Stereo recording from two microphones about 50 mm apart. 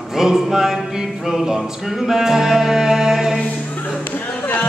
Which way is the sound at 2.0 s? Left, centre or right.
Centre.